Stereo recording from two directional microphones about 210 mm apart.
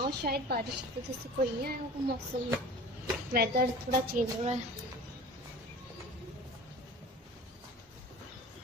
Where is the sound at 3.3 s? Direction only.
45° right (ahead or behind).